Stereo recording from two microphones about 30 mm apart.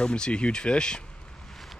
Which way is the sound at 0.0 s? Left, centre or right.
Left.